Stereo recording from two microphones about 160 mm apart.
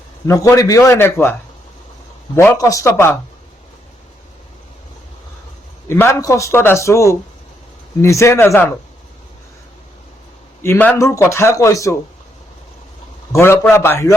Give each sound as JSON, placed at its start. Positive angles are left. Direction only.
{"t": 0.3, "sound": "a man's voice", "side_deg": 20}
{"t": 5.9, "sound": "a man's voice", "side_deg": 15}
{"t": 10.6, "sound": "a man's voice", "side_deg": 15}
{"t": 13.3, "sound": "a man's voice", "side_deg": 15}